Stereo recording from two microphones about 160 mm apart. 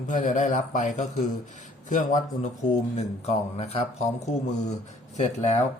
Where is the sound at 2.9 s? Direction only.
40° left (ahead or behind).